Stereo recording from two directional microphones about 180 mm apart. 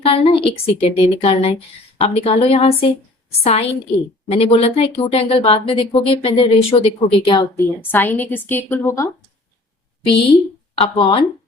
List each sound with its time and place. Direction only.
0.0 s a woman's voice: 30° left (ahead or behind)
7.5 s a woman's voice: 10° left (ahead or behind)
10.8 s speech: 25° left (ahead or behind)